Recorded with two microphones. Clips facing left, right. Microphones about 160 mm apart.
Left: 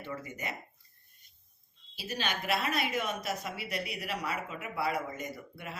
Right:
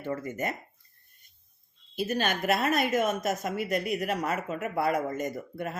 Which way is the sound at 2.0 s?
50° right (ahead or behind).